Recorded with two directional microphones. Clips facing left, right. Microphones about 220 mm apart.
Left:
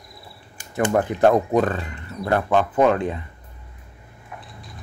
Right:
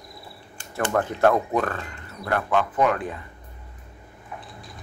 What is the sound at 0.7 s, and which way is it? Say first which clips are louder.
Speech: left 4 dB; 20° left (ahead or behind).